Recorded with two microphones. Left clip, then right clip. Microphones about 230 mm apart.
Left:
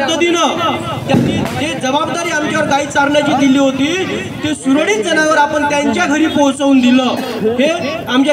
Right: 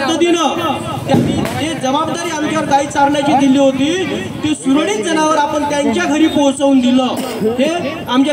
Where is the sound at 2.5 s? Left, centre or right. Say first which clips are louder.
Right 2 dB; left.